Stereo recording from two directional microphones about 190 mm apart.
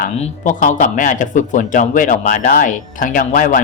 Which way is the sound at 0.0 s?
40° left (ahead or behind).